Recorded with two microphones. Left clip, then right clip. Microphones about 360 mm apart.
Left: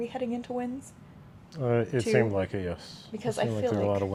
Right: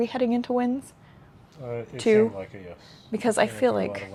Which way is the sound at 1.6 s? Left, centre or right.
Left.